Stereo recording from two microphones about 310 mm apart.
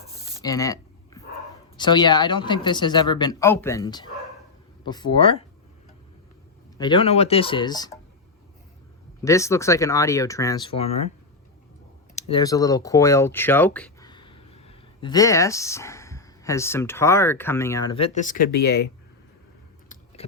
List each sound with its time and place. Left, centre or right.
0.3 s a sound: centre
1.7 s speech: centre
6.7 s speech: centre
9.2 s speech: centre
12.1 s speech: centre; by 18.9 s left
20.2 s a sound: centre